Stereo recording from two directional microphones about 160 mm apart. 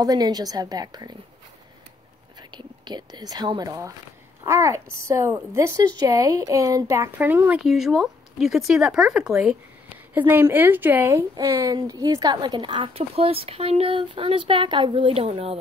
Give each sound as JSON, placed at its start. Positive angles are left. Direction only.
{"t": 0.0, "sound": "a woman's voice", "side_deg": -25}
{"t": 2.5, "sound": "a woman's voice", "side_deg": -25}